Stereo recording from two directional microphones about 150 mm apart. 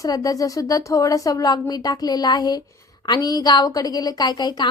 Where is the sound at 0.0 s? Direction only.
25° left (ahead or behind).